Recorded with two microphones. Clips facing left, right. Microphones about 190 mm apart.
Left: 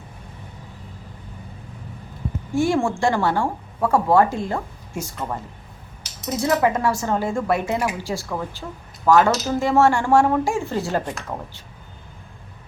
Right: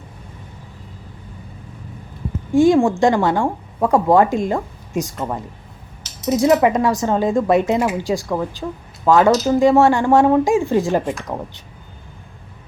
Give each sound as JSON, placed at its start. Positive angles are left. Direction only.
{"t": 2.5, "sound": "speech", "side_deg": -15}